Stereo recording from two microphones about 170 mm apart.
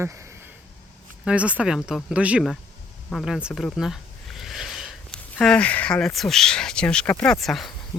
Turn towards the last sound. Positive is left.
turn(degrees=0)  # may be behind; listen again after turning